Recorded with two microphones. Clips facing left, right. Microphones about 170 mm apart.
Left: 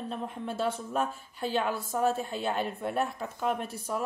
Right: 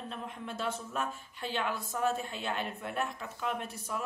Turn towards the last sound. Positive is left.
turn(degrees=40)  # may be behind; listen again after turning